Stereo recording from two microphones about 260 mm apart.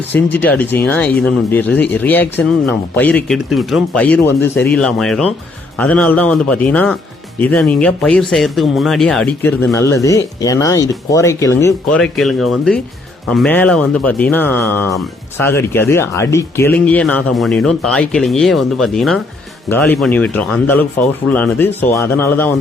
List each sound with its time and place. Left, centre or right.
0.1 s speech: centre